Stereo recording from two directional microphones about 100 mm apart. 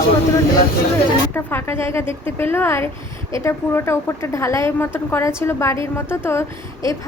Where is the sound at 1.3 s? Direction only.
20° left (ahead or behind).